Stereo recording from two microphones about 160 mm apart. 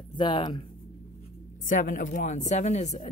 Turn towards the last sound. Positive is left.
turn(degrees=45)  # may be behind; listen again after turning